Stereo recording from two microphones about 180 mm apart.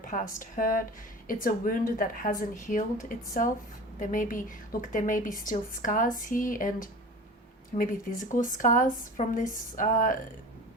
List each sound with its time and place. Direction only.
0.0 s speech: 45° left (ahead or behind)